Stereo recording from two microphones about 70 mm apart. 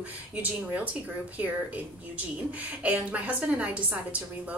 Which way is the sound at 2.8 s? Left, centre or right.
Centre.